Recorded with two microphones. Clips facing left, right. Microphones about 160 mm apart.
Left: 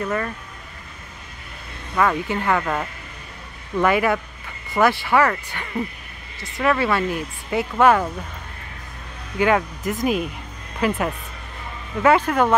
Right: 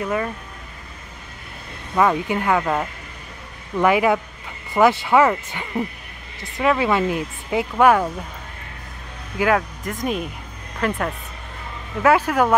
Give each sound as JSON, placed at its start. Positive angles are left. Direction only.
{"t": 0.0, "sound": "speech", "side_deg": -10}
{"t": 2.0, "sound": "speech", "side_deg": -15}
{"t": 9.4, "sound": "speech", "side_deg": 0}